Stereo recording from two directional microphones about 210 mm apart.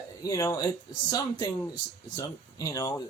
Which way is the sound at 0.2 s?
15° left (ahead or behind).